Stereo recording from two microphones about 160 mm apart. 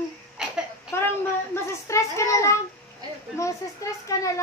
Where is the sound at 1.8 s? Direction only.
20° left (ahead or behind).